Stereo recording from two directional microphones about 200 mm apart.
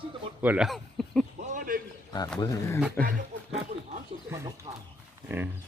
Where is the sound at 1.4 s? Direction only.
45° right (ahead or behind).